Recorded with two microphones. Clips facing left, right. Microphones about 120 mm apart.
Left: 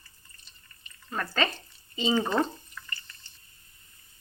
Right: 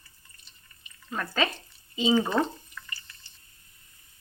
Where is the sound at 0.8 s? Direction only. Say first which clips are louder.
Even; 5° right (ahead or behind).